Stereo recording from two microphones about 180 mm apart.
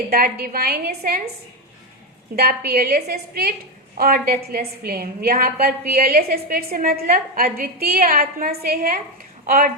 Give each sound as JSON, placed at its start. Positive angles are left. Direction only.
{"t": 0.1, "sound": "a woman's voice", "side_deg": -55}
{"t": 2.3, "sound": "a woman's voice", "side_deg": -60}